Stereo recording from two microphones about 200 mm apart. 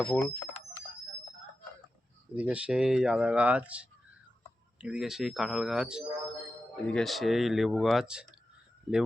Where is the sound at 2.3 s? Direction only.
5° right (ahead or behind).